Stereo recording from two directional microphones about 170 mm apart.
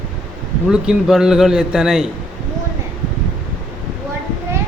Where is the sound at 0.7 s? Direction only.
5° right (ahead or behind).